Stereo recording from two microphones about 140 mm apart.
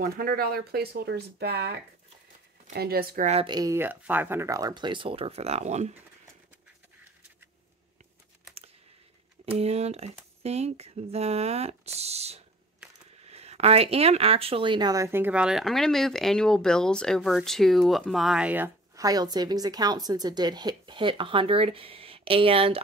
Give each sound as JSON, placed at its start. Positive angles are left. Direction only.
{"t": 0.0, "sound": "speech", "side_deg": -90}
{"t": 2.8, "sound": "speech", "side_deg": -90}
{"t": 3.4, "sound": "speech", "side_deg": -30}
{"t": 3.7, "sound": "speech", "side_deg": -15}
{"t": 9.6, "sound": "speech", "side_deg": -50}
{"t": 18.9, "sound": "speech", "side_deg": -25}